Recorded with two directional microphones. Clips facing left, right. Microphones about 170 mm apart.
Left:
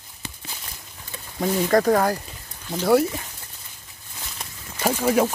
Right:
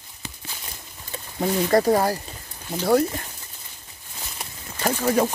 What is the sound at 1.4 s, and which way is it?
Speech, 10° right (ahead or behind).